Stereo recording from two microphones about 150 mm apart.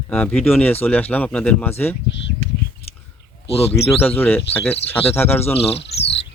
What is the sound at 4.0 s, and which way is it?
Speech, 10° left (ahead or behind).